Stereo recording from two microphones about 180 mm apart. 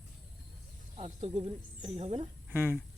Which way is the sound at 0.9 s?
35° right (ahead or behind).